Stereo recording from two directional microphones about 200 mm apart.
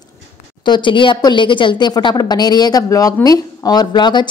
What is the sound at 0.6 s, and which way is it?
Speech, 25° left (ahead or behind).